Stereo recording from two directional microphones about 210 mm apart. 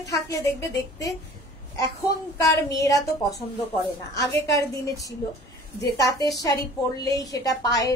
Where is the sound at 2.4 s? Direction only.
15° left (ahead or behind).